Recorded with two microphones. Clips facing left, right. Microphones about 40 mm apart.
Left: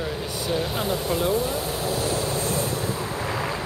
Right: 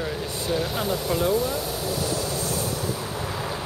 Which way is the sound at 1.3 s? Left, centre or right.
Centre.